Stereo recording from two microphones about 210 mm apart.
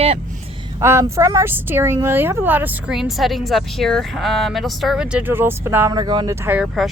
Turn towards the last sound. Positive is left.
turn(degrees=-5)  # may be behind; listen again after turning